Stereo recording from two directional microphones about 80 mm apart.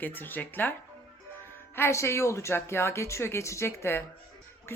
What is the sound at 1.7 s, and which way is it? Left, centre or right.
Speech, left.